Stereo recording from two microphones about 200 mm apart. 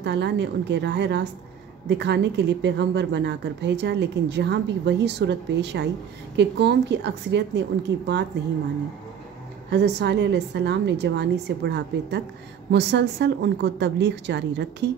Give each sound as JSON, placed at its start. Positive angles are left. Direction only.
{"t": 0.0, "sound": "a woman's voice", "side_deg": -60}
{"t": 9.7, "sound": "a woman's voice", "side_deg": -60}